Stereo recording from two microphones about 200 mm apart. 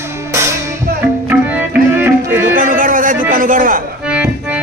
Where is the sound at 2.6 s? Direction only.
45° right (ahead or behind).